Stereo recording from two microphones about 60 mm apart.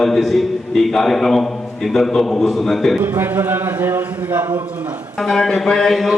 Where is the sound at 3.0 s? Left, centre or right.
Right.